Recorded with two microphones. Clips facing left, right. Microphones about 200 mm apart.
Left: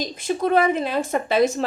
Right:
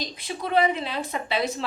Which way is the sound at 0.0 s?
45° left (ahead or behind).